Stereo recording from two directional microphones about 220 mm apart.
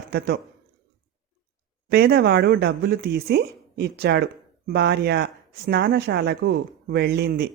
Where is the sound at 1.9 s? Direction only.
45° right (ahead or behind).